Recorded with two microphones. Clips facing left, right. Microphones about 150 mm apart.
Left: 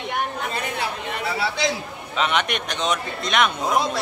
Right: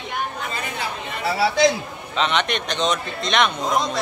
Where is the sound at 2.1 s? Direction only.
10° left (ahead or behind).